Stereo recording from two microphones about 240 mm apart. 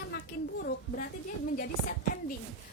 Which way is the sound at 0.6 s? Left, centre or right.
Left.